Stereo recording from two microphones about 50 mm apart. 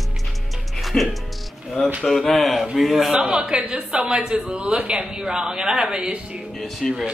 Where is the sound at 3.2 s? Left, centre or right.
Centre.